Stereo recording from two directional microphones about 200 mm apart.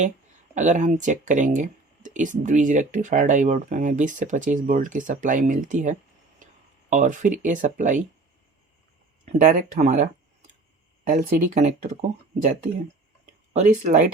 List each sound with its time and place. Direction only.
0.5 s speech: 35° right (ahead or behind)
9.4 s speech: 40° right (ahead or behind)
11.1 s speech: 40° right (ahead or behind)